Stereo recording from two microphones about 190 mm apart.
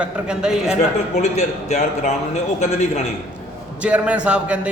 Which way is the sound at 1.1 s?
35° left (ahead or behind).